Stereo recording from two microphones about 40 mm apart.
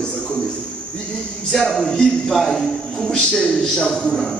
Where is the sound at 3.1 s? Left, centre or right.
Centre.